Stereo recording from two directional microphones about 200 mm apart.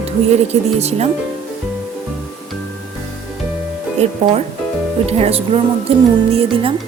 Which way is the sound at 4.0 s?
35° right (ahead or behind).